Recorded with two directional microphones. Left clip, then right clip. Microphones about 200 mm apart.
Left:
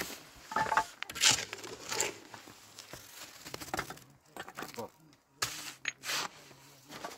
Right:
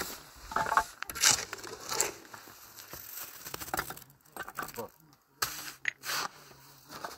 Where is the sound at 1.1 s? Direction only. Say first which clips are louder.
Right 1 dB; 15° right (ahead or behind).